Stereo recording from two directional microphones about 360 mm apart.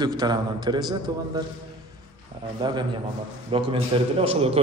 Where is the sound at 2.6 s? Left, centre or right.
Centre.